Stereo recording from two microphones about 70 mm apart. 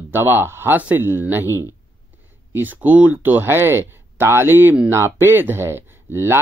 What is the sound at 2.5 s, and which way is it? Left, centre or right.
Speech, right.